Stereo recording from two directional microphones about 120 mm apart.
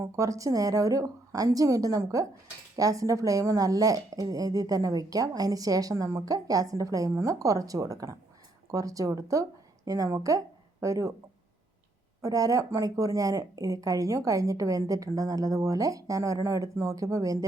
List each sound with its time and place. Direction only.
0.0 s a woman's voice: 25° right (ahead or behind)
12.2 s a woman's voice: 30° right (ahead or behind)